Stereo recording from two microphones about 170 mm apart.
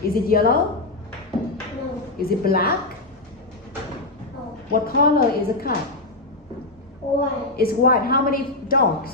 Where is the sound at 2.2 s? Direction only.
60° left (ahead or behind).